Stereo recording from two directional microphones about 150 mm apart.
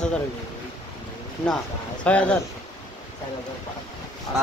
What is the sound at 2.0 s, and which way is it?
Speech, 10° left (ahead or behind).